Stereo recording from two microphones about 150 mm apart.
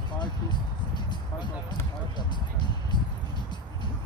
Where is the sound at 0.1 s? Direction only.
30° left (ahead or behind).